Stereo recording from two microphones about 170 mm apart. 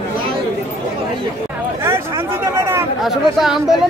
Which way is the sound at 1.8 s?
15° right (ahead or behind).